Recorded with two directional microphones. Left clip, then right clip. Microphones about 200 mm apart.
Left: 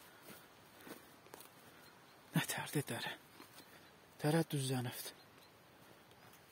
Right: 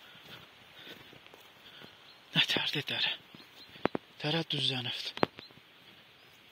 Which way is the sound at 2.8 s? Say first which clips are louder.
Right 12 dB; 20° left (ahead or behind).